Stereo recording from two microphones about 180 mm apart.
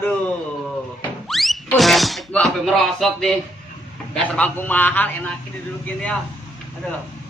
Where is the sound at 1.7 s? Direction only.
Centre (ahead or behind).